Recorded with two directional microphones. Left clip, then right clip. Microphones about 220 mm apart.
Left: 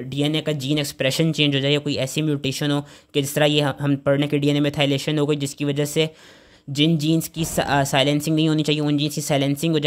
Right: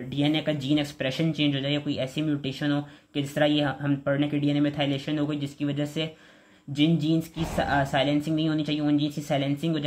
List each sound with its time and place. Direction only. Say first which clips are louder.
0.1 s speech: left 3 dB; 50° left (ahead or behind)